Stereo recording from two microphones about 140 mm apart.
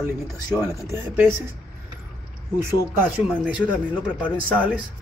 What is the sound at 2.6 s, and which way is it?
Speech, 10° right (ahead or behind).